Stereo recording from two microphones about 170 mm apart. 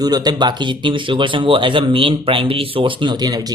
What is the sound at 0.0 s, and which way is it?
Speech, 25° right (ahead or behind).